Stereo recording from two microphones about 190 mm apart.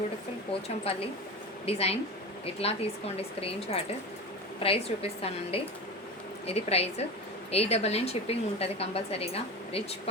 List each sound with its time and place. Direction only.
0.5 s a woman's voice: 30° left (ahead or behind)